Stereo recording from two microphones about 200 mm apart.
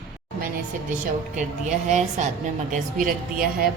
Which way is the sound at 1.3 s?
40° right (ahead or behind).